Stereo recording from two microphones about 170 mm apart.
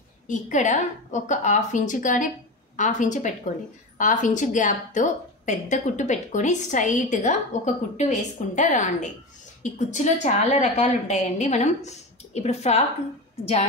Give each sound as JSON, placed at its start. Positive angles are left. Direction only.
{"t": 0.3, "sound": "a woman's voice", "side_deg": 45}